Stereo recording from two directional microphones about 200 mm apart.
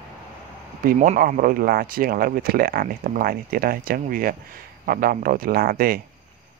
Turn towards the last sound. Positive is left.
turn(degrees=-45)  # may be behind; listen again after turning